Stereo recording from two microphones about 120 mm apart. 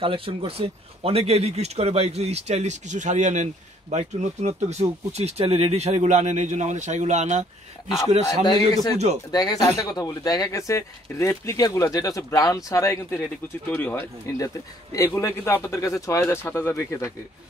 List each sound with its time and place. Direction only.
0.0 s speech: 50° right (ahead or behind); by 7.4 s 75° right (ahead or behind)
8.9 s speech: 65° right (ahead or behind)
9.3 s speech: 30° left (ahead or behind)
13.7 s speech: 15° left (ahead or behind)